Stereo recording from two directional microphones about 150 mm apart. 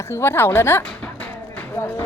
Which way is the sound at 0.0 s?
15° left (ahead or behind).